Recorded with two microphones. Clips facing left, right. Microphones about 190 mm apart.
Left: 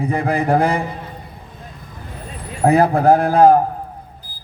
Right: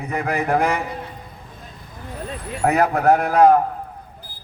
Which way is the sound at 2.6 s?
30° left (ahead or behind).